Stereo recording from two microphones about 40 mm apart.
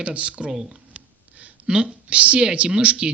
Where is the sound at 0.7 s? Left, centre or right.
Right.